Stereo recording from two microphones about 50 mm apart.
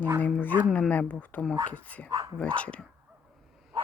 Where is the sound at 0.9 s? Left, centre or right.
Left.